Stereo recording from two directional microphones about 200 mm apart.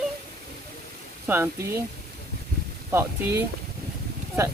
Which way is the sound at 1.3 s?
10° right (ahead or behind).